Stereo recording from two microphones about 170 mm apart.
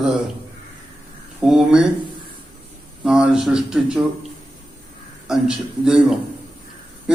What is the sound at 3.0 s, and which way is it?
Speech, 5° right (ahead or behind).